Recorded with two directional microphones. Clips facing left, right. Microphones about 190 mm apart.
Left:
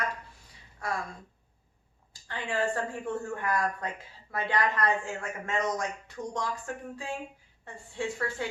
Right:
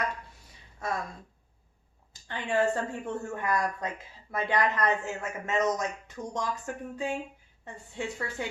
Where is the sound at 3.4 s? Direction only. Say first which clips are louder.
Right 1 dB; 20° right (ahead or behind).